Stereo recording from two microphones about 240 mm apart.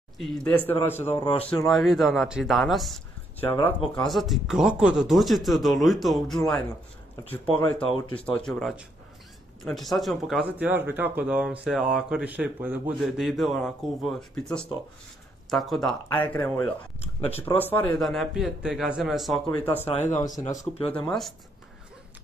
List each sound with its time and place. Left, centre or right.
0.2 s speech: centre
1.2 s speech: left
1.5 s speech: centre
17.0 s speech: left
17.6 s speech: centre
19.9 s speech: left